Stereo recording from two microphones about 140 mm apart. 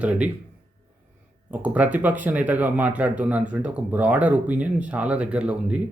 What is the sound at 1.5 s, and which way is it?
A man's voice, 10° right (ahead or behind).